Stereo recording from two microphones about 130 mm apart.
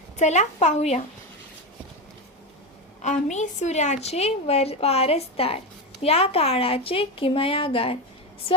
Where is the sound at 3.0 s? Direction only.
65° left (ahead or behind); by 8.6 s 45° left (ahead or behind).